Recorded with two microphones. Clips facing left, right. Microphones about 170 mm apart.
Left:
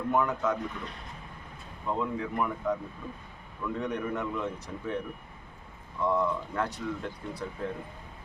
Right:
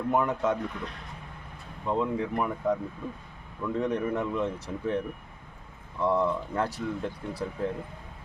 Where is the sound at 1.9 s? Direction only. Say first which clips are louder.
Right 3 dB; 30° right (ahead or behind).